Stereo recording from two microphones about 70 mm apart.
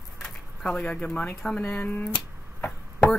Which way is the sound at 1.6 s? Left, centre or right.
Left.